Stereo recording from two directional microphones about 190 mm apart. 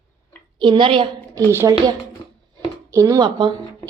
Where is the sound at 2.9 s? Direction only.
15° right (ahead or behind).